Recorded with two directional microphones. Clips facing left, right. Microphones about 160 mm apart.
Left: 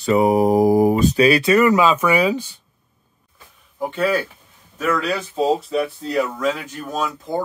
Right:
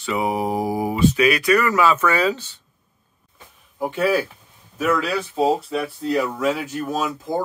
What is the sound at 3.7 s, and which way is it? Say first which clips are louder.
A man's voice: even; 5° right (ahead or behind).